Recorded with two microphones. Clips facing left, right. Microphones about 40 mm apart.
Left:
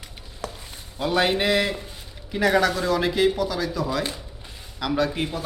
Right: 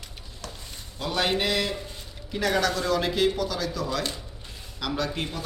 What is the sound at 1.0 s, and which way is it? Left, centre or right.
A man's voice, centre.